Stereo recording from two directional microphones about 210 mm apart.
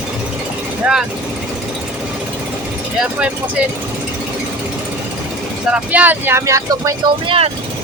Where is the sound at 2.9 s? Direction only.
5° right (ahead or behind).